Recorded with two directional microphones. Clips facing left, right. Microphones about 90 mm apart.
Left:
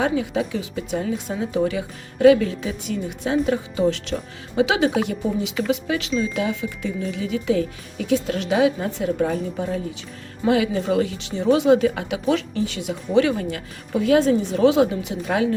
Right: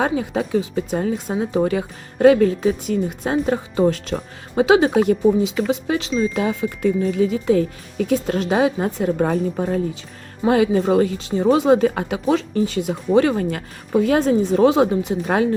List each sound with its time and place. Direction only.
0.0 s speech: 40° right (ahead or behind)